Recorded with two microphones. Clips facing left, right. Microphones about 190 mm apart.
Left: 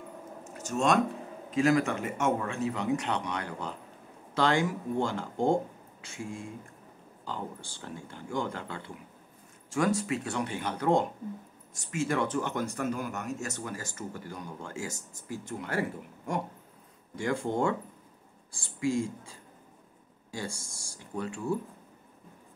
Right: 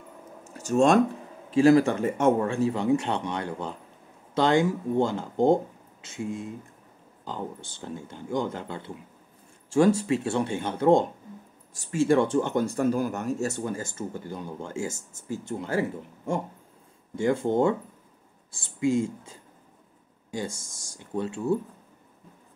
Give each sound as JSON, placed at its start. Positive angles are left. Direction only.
{"t": 0.6, "sound": "speech", "side_deg": -30}
{"t": 17.1, "sound": "speech", "side_deg": -25}
{"t": 20.3, "sound": "speech", "side_deg": -20}